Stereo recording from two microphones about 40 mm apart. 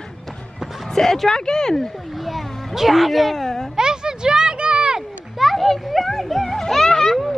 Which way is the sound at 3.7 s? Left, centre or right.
Centre.